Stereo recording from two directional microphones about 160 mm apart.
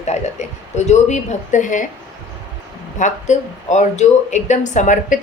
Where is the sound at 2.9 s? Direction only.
50° left (ahead or behind).